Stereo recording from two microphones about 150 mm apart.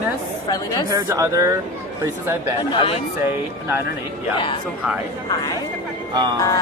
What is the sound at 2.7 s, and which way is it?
Speech, 35° left (ahead or behind).